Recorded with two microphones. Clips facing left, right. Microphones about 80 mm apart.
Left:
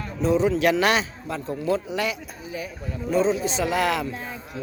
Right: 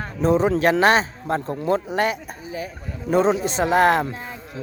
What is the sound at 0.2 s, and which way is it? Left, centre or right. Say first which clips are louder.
Speech: right 2 dB; right.